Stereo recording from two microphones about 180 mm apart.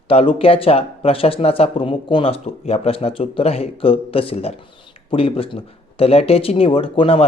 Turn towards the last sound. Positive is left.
turn(degrees=30)  # may be behind; listen again after turning